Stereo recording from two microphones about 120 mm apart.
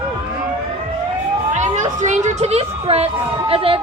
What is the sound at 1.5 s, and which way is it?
A woman's voice, 85° right.